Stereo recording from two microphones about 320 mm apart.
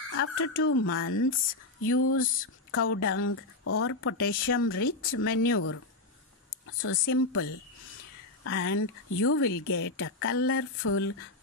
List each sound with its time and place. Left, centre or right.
0.1 s speech: left
6.8 s speech: left
8.5 s speech: left